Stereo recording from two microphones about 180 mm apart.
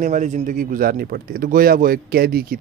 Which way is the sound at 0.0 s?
45° right (ahead or behind).